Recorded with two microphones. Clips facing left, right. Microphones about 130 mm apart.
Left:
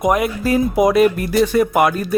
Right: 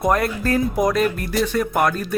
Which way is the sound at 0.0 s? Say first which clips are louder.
Left 3 dB; 15° left (ahead or behind).